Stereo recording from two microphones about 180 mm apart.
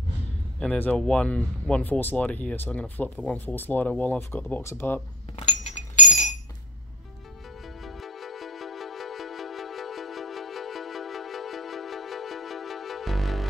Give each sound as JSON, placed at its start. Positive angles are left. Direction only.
{"t": 0.6, "sound": "speech", "side_deg": 5}
{"t": 5.3, "sound": "chink", "side_deg": 40}
{"t": 7.8, "sound": "music", "side_deg": 0}